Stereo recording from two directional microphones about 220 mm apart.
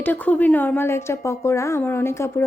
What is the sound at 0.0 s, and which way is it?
Speech, 5° left (ahead or behind).